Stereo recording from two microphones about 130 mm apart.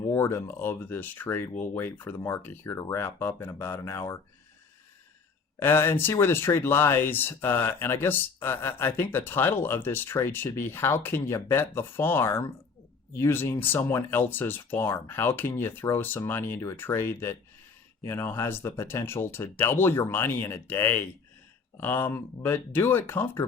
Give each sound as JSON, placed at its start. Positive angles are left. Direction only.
{"t": 0.0, "sound": "speech", "side_deg": 20}
{"t": 5.5, "sound": "speech", "side_deg": 15}